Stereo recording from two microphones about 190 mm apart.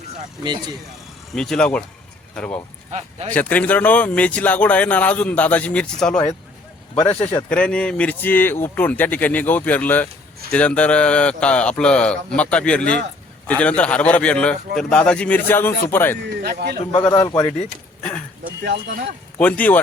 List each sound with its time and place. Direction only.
1.3 s speech: 5° left (ahead or behind)
2.9 s speech: 35° right (ahead or behind)
3.3 s speech: 10° left (ahead or behind)
7.0 s speech: 25° left (ahead or behind)
7.5 s speech: 5° left (ahead or behind)
16.4 s a man's voice: 55° right (ahead or behind)
17.1 s speech: 20° left (ahead or behind)
18.6 s a man's voice: 65° right (ahead or behind)
19.4 s speech: 5° left (ahead or behind)